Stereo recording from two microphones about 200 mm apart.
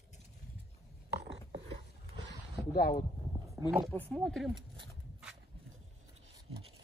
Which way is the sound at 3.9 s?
5° left (ahead or behind).